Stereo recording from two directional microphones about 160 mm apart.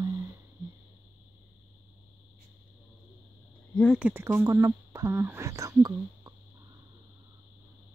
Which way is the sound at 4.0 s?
15° right (ahead or behind).